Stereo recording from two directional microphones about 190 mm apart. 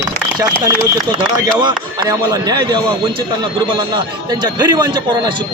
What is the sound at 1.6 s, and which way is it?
Speech, 20° right (ahead or behind).